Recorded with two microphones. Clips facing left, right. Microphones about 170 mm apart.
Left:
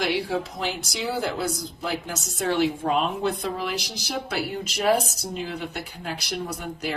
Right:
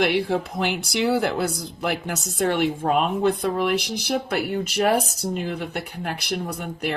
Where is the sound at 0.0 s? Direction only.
60° right (ahead or behind).